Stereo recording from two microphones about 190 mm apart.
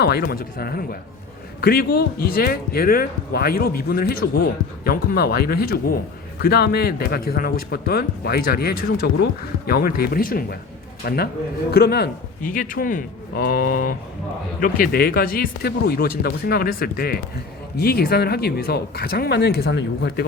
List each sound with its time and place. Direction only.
0.0 s a man's voice: 55° left (ahead or behind)